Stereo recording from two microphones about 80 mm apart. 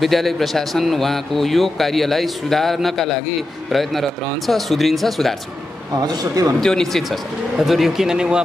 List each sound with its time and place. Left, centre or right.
0.0 s a man's voice: centre
6.1 s speech: right
6.6 s a man's voice: centre